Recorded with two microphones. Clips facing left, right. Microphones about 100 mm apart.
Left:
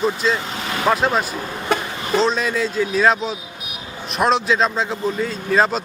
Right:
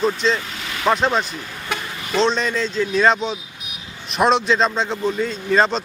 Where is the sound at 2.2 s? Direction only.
5° left (ahead or behind).